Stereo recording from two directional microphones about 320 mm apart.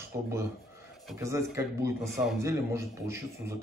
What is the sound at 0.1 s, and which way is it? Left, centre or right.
Speech, centre.